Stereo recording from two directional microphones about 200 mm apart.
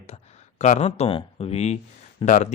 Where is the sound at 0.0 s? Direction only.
35° left (ahead or behind).